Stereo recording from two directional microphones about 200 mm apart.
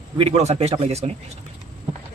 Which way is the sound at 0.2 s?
30° right (ahead or behind).